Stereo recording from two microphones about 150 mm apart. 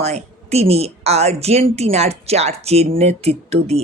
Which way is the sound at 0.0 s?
45° right (ahead or behind).